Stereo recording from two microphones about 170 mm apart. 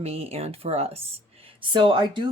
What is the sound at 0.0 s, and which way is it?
Speech, 35° right (ahead or behind).